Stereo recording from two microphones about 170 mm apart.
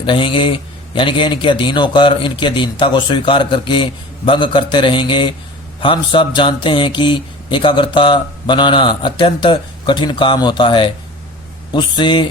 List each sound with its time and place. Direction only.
0.0 s speech: 30° left (ahead or behind)